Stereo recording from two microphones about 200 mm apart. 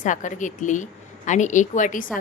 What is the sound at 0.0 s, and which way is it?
A woman's voice, 40° left (ahead or behind).